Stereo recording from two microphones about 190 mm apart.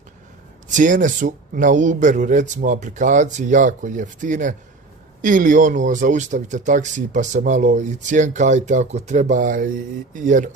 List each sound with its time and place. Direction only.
0.7 s speech: 40° right (ahead or behind)